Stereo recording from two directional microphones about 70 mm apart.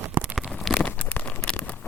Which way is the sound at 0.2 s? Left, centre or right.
Right.